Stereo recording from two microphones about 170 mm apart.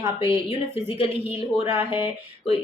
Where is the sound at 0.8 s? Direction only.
35° left (ahead or behind).